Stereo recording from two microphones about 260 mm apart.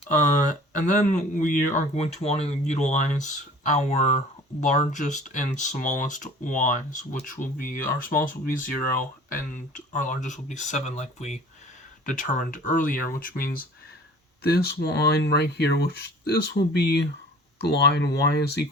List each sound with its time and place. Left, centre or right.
0.2 s speech: left